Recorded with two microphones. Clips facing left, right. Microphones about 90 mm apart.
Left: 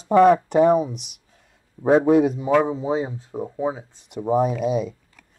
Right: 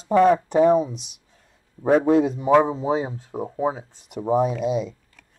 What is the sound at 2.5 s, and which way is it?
Speech, 20° right (ahead or behind).